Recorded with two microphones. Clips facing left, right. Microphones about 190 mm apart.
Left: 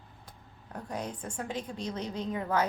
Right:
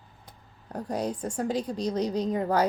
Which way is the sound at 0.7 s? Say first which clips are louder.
Right 7 dB; 35° right (ahead or behind).